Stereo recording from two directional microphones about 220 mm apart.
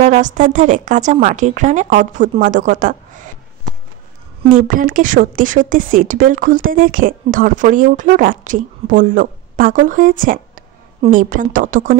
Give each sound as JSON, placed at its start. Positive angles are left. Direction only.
{"t": 0.0, "sound": "a woman's voice", "side_deg": -35}